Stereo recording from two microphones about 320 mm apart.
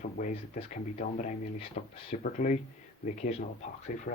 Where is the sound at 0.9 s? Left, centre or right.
Left.